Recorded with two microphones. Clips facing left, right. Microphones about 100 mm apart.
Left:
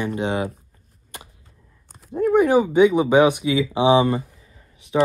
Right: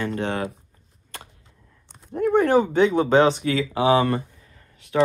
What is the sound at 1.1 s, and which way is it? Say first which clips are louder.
Arrow: even; 15° left (ahead or behind).